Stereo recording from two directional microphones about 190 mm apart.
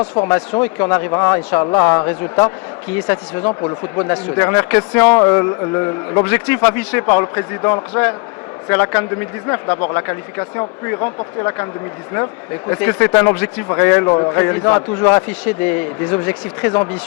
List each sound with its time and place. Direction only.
0.0 s speech: 20° left (ahead or behind)
3.6 s speech: 15° left (ahead or behind)